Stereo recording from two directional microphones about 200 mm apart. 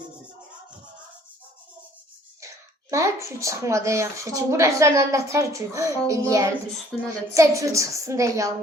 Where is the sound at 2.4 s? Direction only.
15° right (ahead or behind).